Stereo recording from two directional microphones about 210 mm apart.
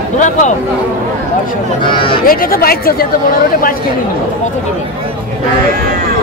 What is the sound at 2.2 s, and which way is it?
Speech, 45° left (ahead or behind).